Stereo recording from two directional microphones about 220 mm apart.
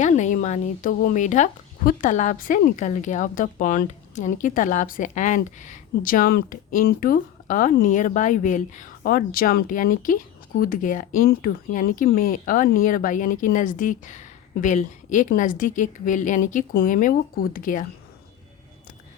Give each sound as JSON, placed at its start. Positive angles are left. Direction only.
{"t": 0.0, "sound": "speech", "side_deg": 35}